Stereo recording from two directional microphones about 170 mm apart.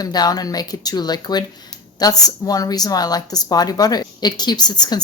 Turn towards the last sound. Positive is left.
turn(degrees=25)  # may be behind; listen again after turning